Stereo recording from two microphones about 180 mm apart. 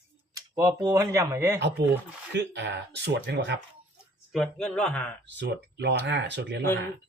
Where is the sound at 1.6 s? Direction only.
75° right (ahead or behind).